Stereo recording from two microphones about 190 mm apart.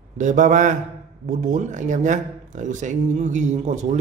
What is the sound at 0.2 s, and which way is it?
Speech, 40° right (ahead or behind).